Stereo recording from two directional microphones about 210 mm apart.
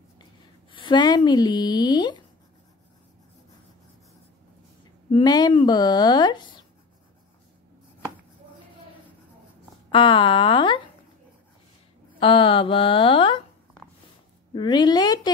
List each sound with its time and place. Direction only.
0.2 s speech: 20° left (ahead or behind)
5.1 s speech: 20° left (ahead or behind)
9.8 s speech: 25° left (ahead or behind)
12.2 s speech: 25° left (ahead or behind)
14.5 s speech: 20° left (ahead or behind)